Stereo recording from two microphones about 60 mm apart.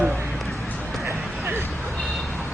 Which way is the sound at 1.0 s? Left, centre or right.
Right.